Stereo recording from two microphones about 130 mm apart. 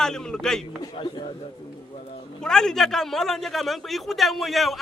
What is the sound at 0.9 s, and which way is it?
Speech, 40° left (ahead or behind).